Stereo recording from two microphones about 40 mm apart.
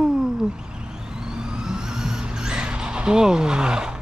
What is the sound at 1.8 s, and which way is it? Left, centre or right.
Vehicle, centre.